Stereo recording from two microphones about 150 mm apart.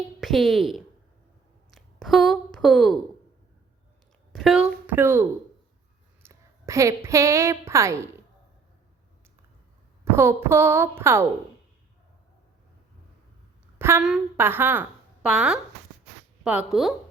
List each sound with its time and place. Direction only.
0.2 s speech: centre (ahead or behind)
4.3 s a woman's voice: centre (ahead or behind); by 7.9 s 20° right (ahead or behind)
10.0 s a woman's voice: 15° right (ahead or behind)
13.7 s a sound: 15° right (ahead or behind)
14.0 s a woman's voice: 5° right (ahead or behind)